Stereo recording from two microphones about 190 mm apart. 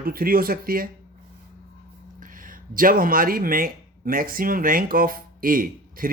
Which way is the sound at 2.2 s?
45° right (ahead or behind).